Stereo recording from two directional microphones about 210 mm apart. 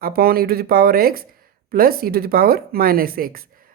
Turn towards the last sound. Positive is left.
turn(degrees=-45)  # may be behind; listen again after turning